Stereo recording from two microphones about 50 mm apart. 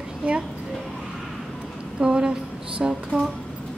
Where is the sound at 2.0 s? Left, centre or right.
Centre.